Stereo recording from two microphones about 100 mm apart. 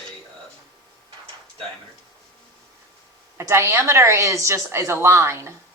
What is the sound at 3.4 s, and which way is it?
Speech, 25° right (ahead or behind).